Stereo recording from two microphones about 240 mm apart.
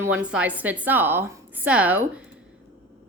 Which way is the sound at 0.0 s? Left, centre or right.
Centre.